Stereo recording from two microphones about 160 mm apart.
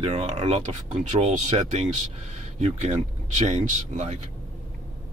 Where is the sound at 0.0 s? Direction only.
40° right (ahead or behind).